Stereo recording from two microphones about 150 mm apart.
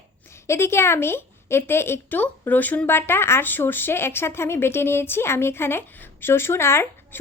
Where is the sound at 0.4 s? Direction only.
15° left (ahead or behind).